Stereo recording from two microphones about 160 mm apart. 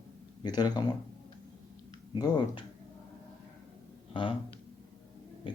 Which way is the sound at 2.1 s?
25° left (ahead or behind).